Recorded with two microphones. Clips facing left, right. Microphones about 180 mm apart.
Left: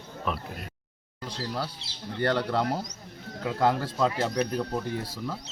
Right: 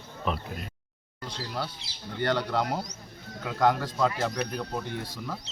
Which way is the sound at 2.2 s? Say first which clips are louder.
Left 1 dB; 30° left (ahead or behind).